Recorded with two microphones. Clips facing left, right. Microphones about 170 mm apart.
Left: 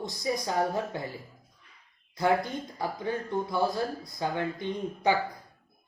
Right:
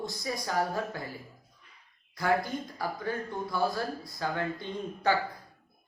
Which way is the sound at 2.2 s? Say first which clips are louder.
Left 2 dB; 20° left (ahead or behind).